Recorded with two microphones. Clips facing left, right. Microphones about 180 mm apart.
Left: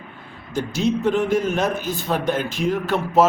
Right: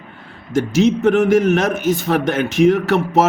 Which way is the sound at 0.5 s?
85° right.